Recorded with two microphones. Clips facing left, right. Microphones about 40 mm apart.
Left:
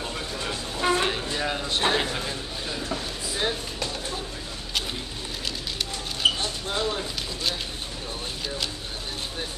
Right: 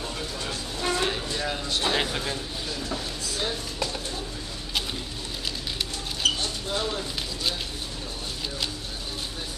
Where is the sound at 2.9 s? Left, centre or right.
Left.